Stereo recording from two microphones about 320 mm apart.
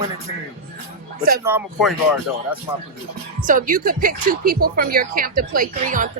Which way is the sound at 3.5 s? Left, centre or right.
Right.